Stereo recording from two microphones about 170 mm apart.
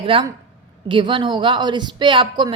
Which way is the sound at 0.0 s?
30° right (ahead or behind).